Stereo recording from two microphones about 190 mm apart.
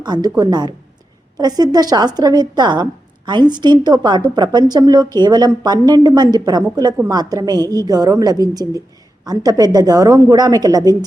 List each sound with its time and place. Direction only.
0.0 s a woman's voice: 20° right (ahead or behind)